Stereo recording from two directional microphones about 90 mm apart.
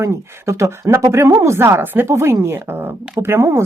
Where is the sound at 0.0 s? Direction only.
35° right (ahead or behind).